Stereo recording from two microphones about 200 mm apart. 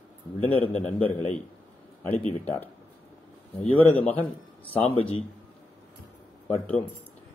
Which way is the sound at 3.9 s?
10° left (ahead or behind).